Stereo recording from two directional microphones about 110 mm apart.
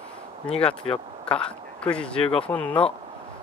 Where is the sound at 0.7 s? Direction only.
65° left (ahead or behind).